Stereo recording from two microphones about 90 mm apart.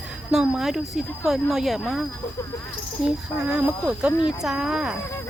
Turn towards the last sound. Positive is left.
turn(degrees=-5)  # may be behind; listen again after turning